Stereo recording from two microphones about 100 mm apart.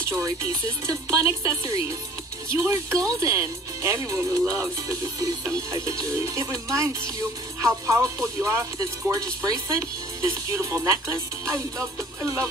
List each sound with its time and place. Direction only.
0.8 s speech: 30° right (ahead or behind)